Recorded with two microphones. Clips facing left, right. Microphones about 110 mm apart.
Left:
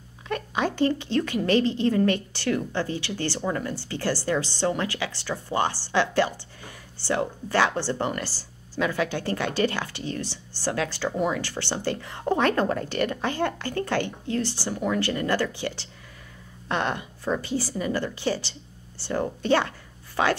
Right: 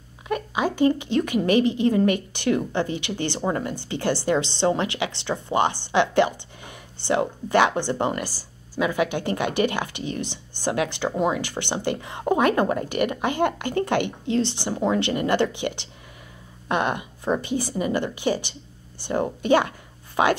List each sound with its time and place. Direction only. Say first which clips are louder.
0.3 s a woman's voice: right 2 dB; 10° right (ahead or behind)